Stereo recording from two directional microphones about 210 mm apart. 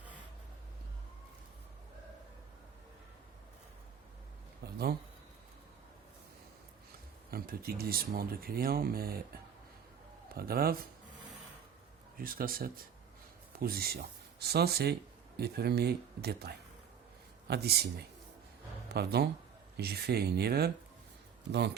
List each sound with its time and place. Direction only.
4.6 s a sound: 50° right (ahead or behind)
7.3 s speech: 45° right (ahead or behind)
10.2 s a man's voice: 45° right (ahead or behind)
12.1 s speech: 45° right (ahead or behind)
18.9 s speech: 50° right (ahead or behind)